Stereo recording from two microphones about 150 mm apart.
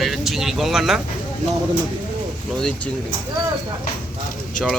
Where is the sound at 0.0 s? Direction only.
Centre (ahead or behind).